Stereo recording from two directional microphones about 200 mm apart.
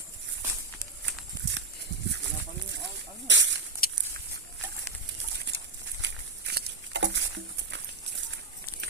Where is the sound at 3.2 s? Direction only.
65° right (ahead or behind).